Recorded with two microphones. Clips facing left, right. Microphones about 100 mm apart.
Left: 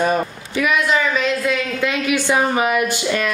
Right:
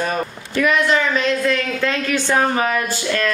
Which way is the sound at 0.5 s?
5° left (ahead or behind).